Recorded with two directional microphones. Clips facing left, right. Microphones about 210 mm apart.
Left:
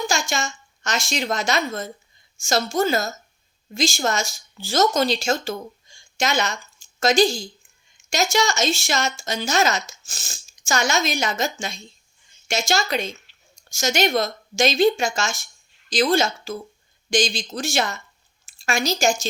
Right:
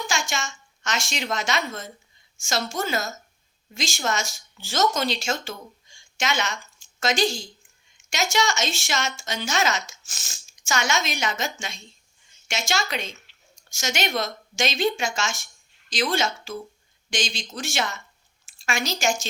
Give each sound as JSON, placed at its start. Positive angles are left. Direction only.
{"t": 0.1, "sound": "a woman's voice", "side_deg": 35}